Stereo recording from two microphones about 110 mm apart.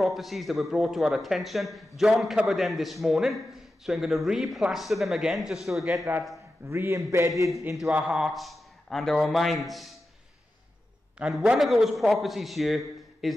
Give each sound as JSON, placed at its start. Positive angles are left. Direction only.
{"t": 0.0, "sound": "a man's voice", "side_deg": 0}
{"t": 6.6, "sound": "a man's voice", "side_deg": -20}
{"t": 7.9, "sound": "a man's voice", "side_deg": -5}
{"t": 11.1, "sound": "a man's voice", "side_deg": -10}